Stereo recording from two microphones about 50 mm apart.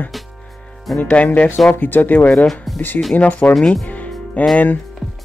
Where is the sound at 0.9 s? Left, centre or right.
Centre.